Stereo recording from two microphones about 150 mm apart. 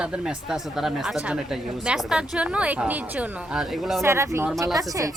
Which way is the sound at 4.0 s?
20° right (ahead or behind).